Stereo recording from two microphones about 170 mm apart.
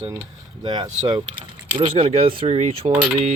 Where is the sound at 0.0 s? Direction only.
15° right (ahead or behind).